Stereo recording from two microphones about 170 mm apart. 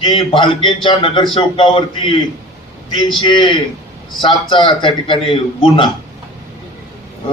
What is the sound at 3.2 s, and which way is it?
A man's voice, 30° left (ahead or behind).